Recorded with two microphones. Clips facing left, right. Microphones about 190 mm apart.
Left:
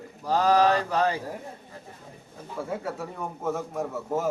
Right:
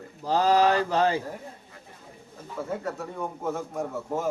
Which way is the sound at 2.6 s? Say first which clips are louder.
Even; 10° left (ahead or behind).